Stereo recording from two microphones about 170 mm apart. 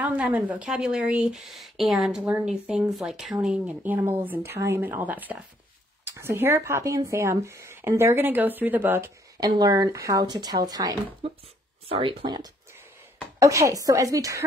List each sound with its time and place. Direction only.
0.0 s a woman's voice: 5° right (ahead or behind)
9.4 s speech: 20° right (ahead or behind)
11.2 s speech: 30° right (ahead or behind)